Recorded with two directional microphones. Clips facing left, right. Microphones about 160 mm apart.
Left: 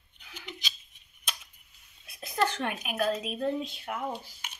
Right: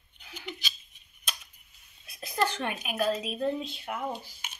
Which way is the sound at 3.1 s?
5° right (ahead or behind).